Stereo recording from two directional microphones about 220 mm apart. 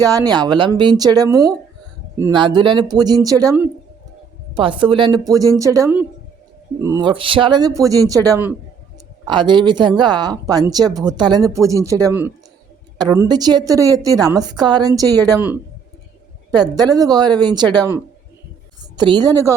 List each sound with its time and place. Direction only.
0.0 s a woman's voice: 15° right (ahead or behind)
16.6 s speech: 20° right (ahead or behind)